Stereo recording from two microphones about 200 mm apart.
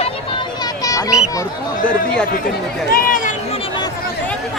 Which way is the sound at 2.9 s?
45° left (ahead or behind).